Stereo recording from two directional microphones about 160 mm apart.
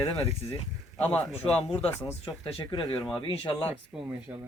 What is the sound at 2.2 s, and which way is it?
Speech, 35° left (ahead or behind).